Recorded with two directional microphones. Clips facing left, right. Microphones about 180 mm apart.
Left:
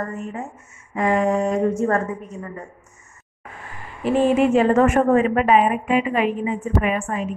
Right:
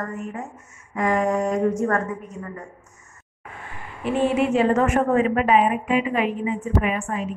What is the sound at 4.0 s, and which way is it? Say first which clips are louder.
A woman's voice: left 4 dB; 45° left (ahead or behind).